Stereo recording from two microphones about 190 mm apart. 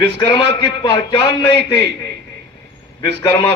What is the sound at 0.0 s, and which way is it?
A man's voice, 25° left (ahead or behind).